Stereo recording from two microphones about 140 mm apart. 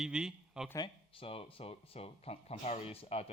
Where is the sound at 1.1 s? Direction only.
40° left (ahead or behind).